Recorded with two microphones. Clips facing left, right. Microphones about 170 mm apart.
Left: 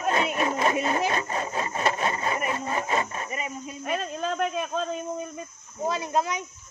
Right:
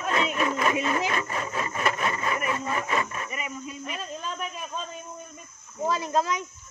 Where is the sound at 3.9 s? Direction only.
80° left.